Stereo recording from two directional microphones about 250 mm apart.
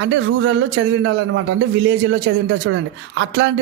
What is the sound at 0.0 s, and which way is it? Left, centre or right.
A woman's voice, right.